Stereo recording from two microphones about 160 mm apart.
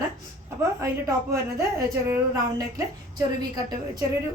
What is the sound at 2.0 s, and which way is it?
A woman's voice, 20° right (ahead or behind).